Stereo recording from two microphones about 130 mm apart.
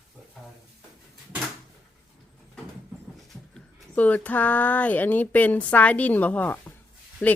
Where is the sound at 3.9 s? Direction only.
10° left (ahead or behind).